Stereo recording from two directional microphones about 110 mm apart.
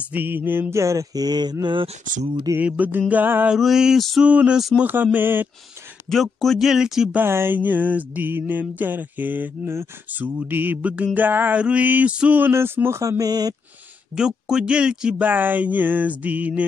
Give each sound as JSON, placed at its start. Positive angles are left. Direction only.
{"t": 0.1, "sound": "mantra", "side_deg": -15}
{"t": 2.6, "sound": "mantra", "side_deg": -15}
{"t": 3.5, "sound": "speech", "side_deg": -5}
{"t": 4.3, "sound": "mantra", "side_deg": -10}
{"t": 6.0, "sound": "speech", "side_deg": 0}
{"t": 7.2, "sound": "mantra", "side_deg": -20}
{"t": 14.1, "sound": "mantra", "side_deg": -5}